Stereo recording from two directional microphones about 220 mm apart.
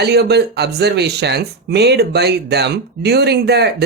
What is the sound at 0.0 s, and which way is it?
Speech, 50° right (ahead or behind).